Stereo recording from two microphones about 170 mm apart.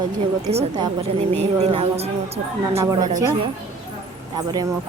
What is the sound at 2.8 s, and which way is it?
Speech, 20° right (ahead or behind).